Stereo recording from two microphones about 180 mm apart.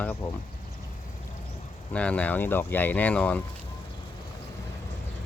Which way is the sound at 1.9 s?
5° left (ahead or behind).